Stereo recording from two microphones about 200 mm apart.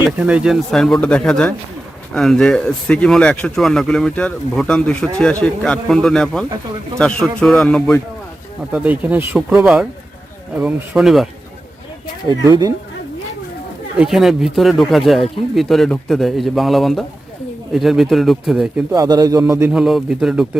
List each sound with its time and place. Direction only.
0.2 s speech: 5° right (ahead or behind)
8.7 s a man's voice: 5° right (ahead or behind)
12.3 s speech: 20° right (ahead or behind)
14.0 s speech: centre (ahead or behind)
18.9 s a man's voice: 20° right (ahead or behind)